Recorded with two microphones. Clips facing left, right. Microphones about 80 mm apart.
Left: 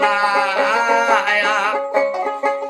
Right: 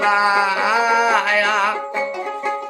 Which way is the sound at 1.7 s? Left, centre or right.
Left.